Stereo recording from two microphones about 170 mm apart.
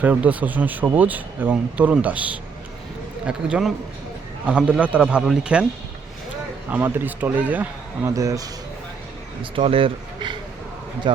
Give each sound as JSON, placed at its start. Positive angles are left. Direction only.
{"t": 0.0, "sound": "a man's voice", "side_deg": -10}
{"t": 6.7, "sound": "speech", "side_deg": -10}
{"t": 9.4, "sound": "speech", "side_deg": -30}